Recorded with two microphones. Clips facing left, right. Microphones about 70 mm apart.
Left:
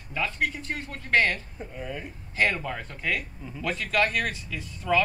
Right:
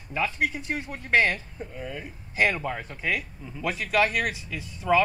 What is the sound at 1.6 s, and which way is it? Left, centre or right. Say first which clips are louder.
Speech: even; centre.